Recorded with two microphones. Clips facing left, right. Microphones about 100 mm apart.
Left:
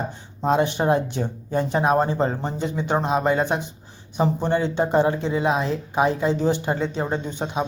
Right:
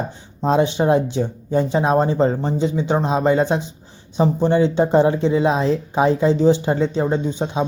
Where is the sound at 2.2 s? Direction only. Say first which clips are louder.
Right 5 dB; 5° left (ahead or behind).